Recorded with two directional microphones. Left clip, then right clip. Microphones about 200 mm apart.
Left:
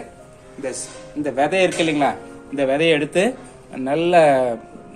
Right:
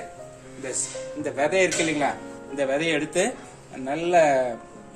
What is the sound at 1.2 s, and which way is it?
A man's voice, 30° left (ahead or behind).